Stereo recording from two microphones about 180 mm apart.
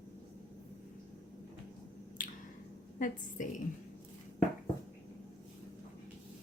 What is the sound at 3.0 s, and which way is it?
Speech, 45° left (ahead or behind).